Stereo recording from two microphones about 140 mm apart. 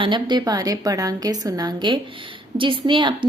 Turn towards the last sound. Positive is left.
turn(degrees=-35)  # may be behind; listen again after turning